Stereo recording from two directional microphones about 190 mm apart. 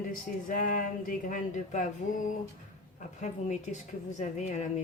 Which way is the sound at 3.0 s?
40° left (ahead or behind).